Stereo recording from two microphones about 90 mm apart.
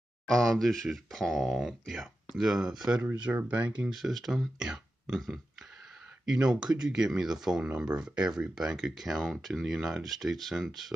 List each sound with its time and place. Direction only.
0.3 s speech: 5° left (ahead or behind); by 3.7 s 15° right (ahead or behind)
3.9 s speech: centre (ahead or behind)